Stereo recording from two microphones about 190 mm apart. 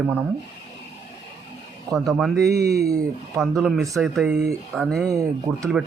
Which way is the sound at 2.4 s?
55° right (ahead or behind).